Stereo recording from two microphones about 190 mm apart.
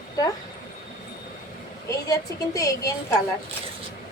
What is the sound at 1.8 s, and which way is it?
A woman's voice, 20° left (ahead or behind).